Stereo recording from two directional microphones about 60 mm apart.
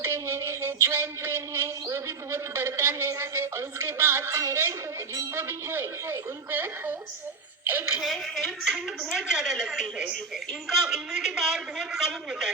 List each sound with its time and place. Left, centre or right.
0.0 s a sound: right
5.3 s speech: right
8.0 s a man's voice: centre